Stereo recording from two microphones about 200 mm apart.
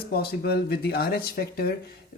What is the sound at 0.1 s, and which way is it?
Speech, 50° left (ahead or behind).